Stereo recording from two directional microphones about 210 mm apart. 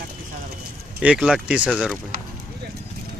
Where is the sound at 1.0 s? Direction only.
5° right (ahead or behind).